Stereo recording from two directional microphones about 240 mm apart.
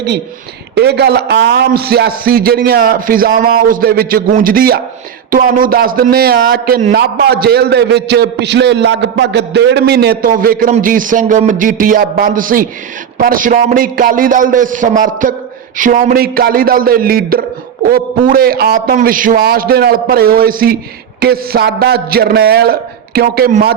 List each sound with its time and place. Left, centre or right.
0.8 s a man's voice: right